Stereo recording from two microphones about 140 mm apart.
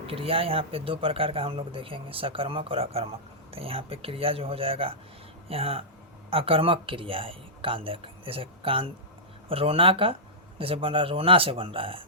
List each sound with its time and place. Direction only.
0.1 s speech: 40° right (ahead or behind)